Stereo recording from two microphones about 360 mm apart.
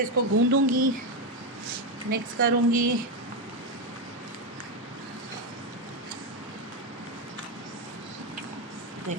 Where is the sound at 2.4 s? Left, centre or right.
Right.